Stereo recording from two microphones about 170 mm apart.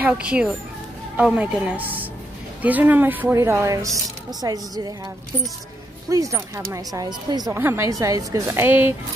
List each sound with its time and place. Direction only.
0.0 s a woman's voice: 5° right (ahead or behind)